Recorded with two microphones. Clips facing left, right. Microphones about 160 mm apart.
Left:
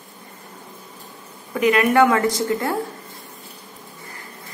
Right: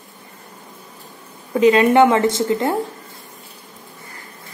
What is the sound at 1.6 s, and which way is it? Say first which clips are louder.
A woman's voice: right 4 dB; 25° right (ahead or behind).